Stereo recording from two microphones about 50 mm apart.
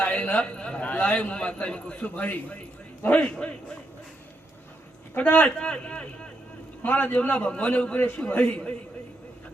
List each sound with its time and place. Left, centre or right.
0.0 s a man's voice: left
5.1 s a man's voice: left
5.5 s a man's voice: left
6.8 s a man's voice: left